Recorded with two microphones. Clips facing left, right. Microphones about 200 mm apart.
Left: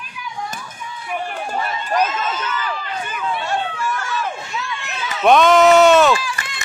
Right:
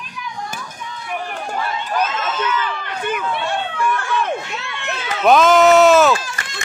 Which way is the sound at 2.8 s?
65° right (ahead or behind).